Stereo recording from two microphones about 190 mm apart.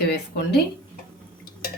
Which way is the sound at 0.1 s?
60° left (ahead or behind).